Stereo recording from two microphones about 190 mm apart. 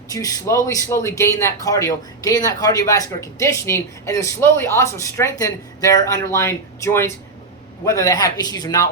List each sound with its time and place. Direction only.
0.1 s a man's voice: 20° left (ahead or behind)